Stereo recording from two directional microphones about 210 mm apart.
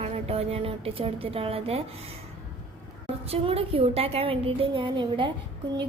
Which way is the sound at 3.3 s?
25° right (ahead or behind).